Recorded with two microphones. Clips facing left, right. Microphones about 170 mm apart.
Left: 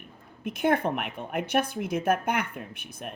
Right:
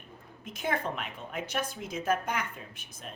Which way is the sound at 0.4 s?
60° left (ahead or behind).